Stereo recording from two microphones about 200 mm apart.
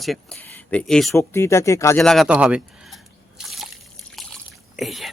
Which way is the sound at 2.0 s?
Centre (ahead or behind).